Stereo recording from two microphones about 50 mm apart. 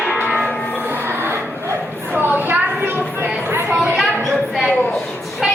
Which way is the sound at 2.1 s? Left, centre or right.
Right.